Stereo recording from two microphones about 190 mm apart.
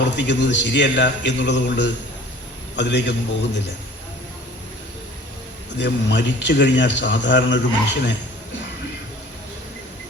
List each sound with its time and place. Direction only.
0.2 s a man's voice: 65° left (ahead or behind)
5.7 s speech: 65° left (ahead or behind)